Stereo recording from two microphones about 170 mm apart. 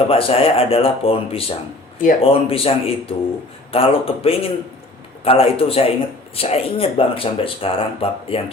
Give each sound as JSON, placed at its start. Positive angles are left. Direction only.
{"t": 0.1, "sound": "speech", "side_deg": 35}
{"t": 2.0, "sound": "speech", "side_deg": 50}
{"t": 2.3, "sound": "speech", "side_deg": 35}